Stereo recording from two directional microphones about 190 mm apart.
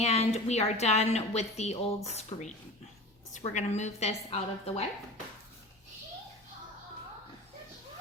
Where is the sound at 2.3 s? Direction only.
25° left (ahead or behind).